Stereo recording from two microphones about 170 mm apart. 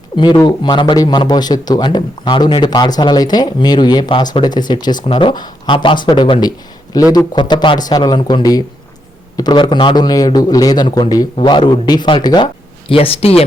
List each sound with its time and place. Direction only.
0.2 s a man's voice: 25° left (ahead or behind)